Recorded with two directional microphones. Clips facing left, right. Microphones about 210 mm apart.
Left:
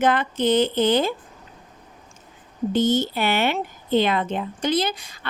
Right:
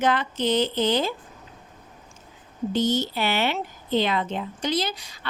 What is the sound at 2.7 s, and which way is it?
A woman's voice, 50° left (ahead or behind).